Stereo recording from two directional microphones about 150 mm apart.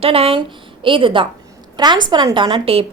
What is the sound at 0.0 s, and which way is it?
A woman's voice, 40° right (ahead or behind).